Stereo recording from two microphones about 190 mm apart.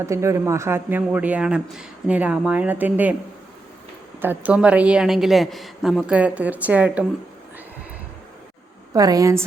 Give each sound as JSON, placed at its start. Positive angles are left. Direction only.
{"t": 0.0, "sound": "a man's voice", "side_deg": -15}
{"t": 4.2, "sound": "a man's voice", "side_deg": -10}
{"t": 8.9, "sound": "a woman's voice", "side_deg": -20}